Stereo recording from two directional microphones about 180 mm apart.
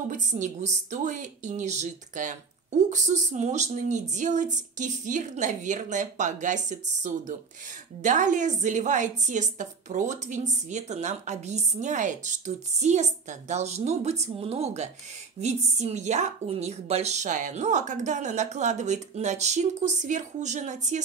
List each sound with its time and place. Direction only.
0.1 s a woman's voice: 40° right (ahead or behind)